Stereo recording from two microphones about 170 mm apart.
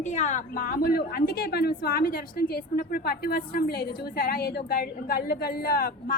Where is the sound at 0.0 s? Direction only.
45° left (ahead or behind).